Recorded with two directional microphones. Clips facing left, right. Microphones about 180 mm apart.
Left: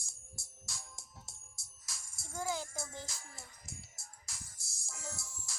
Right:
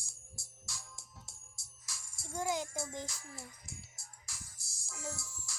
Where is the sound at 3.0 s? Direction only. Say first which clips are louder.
Right 4 dB; 30° left (ahead or behind).